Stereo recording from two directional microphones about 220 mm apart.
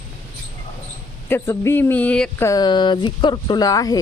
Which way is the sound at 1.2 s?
10° left (ahead or behind).